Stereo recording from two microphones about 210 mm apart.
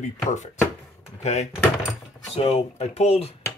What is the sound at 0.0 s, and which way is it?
Speech, 35° left (ahead or behind).